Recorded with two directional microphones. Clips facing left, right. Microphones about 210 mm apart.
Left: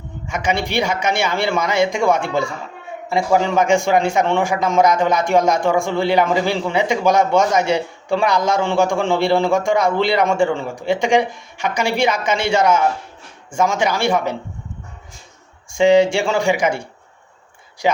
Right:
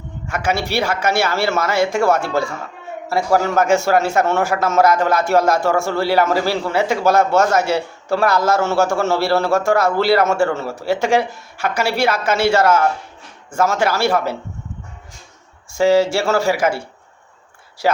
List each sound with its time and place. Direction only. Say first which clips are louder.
0.3 s a man's voice: right 1 dB; 5° right (ahead or behind)
15.7 s a man's voice: left 1 dB; 5° right (ahead or behind)